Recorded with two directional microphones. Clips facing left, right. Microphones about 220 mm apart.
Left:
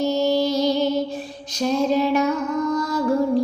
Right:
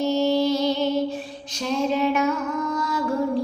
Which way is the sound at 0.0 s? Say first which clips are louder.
Left 1 dB; 40° left (ahead or behind).